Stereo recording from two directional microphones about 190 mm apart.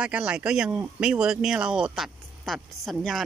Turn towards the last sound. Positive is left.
turn(degrees=0)  # may be behind; listen again after turning